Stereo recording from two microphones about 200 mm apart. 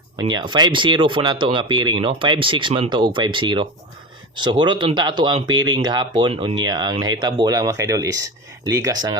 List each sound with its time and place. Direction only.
0.2 s speech: 20° right (ahead or behind)